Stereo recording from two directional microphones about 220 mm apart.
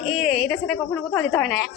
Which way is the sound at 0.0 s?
Centre (ahead or behind).